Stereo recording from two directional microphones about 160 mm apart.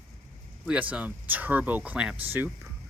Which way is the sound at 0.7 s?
10° right (ahead or behind).